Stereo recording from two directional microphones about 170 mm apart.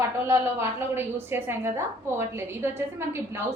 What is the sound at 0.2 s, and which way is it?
A woman's voice, 15° right (ahead or behind).